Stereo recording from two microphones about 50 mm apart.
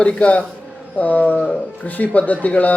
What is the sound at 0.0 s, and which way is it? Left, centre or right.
A man's voice, left.